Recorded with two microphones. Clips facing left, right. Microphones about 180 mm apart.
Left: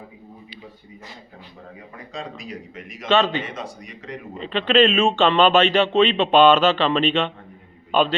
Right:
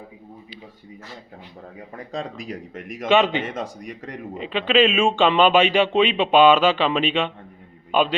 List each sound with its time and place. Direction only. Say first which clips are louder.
2.1 s a man's voice: right 3 dB; 50° right (ahead or behind)
3.1 s speech: right 1 dB; 15° right (ahead or behind)
3.4 s a man's voice: right 4 dB; 50° right (ahead or behind)
4.4 s speech: left 1 dB; 10° right (ahead or behind)